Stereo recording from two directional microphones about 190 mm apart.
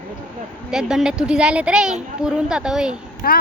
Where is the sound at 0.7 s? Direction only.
5° right (ahead or behind).